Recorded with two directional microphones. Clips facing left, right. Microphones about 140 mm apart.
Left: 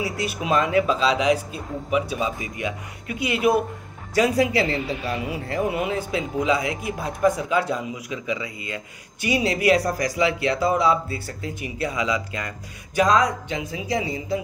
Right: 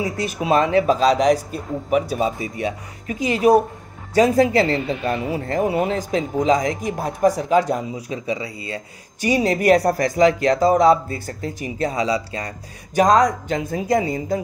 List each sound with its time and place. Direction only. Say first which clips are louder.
0.0 s speech: right 3 dB; 35° right (ahead or behind)